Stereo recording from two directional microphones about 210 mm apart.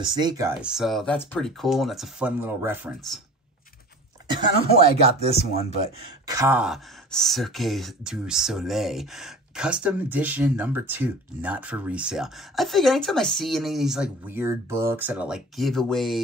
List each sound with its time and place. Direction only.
0.0 s speech: 20° right (ahead or behind)
0.6 s speech: 5° right (ahead or behind)
4.3 s speech: 30° right (ahead or behind)
6.2 s speech: 15° right (ahead or behind)